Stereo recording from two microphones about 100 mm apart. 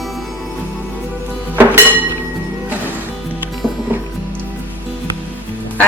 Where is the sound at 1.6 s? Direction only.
20° right (ahead or behind).